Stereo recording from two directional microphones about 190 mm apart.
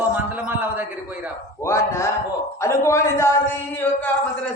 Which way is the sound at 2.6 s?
15° left (ahead or behind).